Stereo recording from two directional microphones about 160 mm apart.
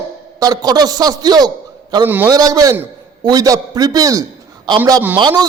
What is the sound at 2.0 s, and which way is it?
Speech, 10° right (ahead or behind).